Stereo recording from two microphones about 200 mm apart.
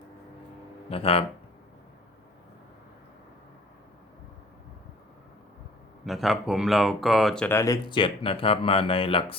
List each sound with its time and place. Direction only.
0.9 s speech: 30° left (ahead or behind)
6.1 s speech: centre (ahead or behind); by 9.2 s 25° left (ahead or behind)